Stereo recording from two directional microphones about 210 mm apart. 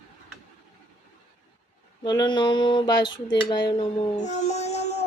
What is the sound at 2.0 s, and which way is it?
Child singing, 20° left (ahead or behind).